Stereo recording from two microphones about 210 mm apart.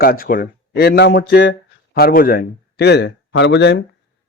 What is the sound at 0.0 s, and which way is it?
Speech, 45° left (ahead or behind).